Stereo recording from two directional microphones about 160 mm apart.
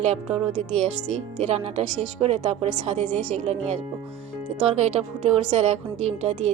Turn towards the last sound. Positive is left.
turn(degrees=-40)  # may be behind; listen again after turning